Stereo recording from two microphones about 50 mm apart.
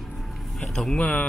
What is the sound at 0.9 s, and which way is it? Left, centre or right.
Speech, left.